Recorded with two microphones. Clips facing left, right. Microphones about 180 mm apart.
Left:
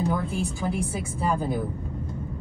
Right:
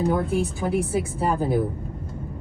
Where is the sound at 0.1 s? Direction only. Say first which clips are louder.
Right 5 dB; 60° right (ahead or behind).